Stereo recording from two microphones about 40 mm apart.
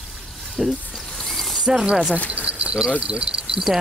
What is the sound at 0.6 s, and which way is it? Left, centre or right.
Speech, centre.